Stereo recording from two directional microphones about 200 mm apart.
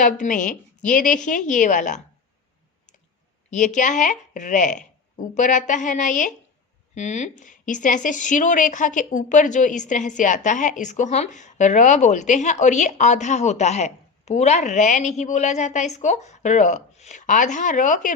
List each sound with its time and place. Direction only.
0.0 s a woman's voice: 40° left (ahead or behind)
3.5 s a woman's voice: 40° left (ahead or behind)